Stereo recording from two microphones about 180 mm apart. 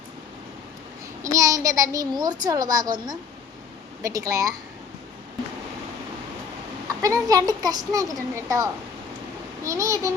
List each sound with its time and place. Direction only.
1.2 s a child's voice: 15° right (ahead or behind)
4.0 s a woman's voice: 20° right (ahead or behind)
6.8 s a woman's voice: 20° right (ahead or behind)